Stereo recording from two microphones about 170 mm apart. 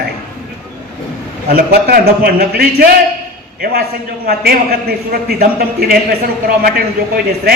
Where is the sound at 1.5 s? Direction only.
60° right (ahead or behind).